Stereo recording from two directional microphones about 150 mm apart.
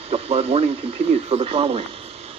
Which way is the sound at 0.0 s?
45° right (ahead or behind).